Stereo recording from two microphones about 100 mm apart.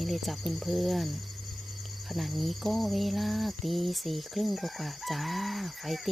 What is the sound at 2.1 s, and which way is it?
Cricket, centre (ahead or behind).